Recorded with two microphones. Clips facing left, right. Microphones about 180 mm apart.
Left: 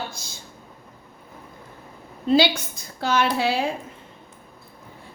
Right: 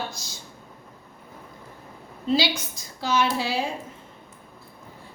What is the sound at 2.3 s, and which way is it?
A woman's voice, 55° left (ahead or behind).